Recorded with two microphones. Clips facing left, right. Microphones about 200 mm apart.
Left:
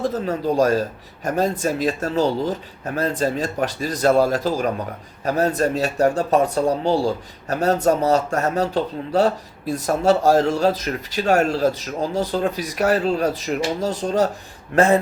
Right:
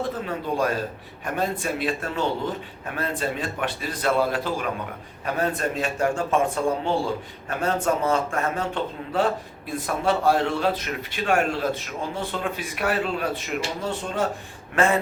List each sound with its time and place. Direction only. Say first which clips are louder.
0.0 s speech: left 6 dB; 40° left (ahead or behind)